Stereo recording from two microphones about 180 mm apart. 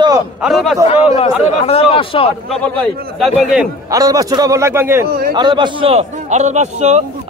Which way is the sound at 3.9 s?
20° right (ahead or behind).